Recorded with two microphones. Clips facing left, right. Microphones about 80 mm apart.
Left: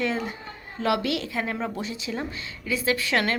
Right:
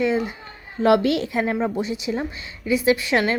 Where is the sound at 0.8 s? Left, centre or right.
Right.